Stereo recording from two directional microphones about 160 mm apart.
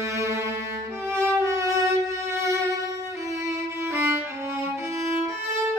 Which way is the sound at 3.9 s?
15° right (ahead or behind).